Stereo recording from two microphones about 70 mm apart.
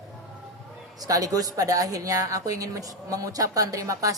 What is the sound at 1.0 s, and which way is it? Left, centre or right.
Speech, right.